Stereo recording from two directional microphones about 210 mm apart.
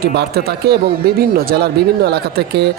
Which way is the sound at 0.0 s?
50° right (ahead or behind).